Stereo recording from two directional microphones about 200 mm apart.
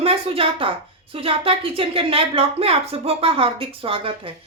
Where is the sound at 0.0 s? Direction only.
30° right (ahead or behind).